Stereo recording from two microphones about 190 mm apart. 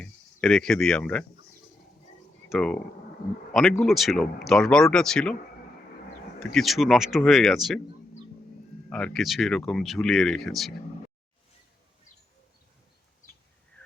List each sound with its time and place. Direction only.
0.0 s speech: 5° left (ahead or behind)
2.5 s speech: 5° left (ahead or behind)
6.4 s speech: centre (ahead or behind)
8.9 s speech: 5° left (ahead or behind)